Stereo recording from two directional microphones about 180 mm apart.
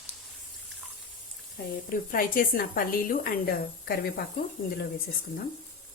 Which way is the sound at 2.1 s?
50° left (ahead or behind).